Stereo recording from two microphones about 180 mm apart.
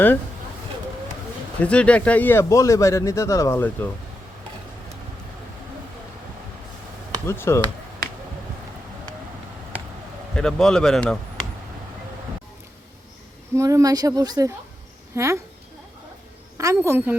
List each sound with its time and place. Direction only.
1.6 s speech: 5° left (ahead or behind)
7.3 s speech: 15° left (ahead or behind)
10.3 s a man's voice: 5° left (ahead or behind)
13.6 s a woman's voice: 15° right (ahead or behind)
16.6 s a woman's voice: 15° right (ahead or behind)